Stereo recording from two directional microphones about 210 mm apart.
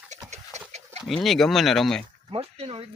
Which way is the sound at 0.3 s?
35° right (ahead or behind).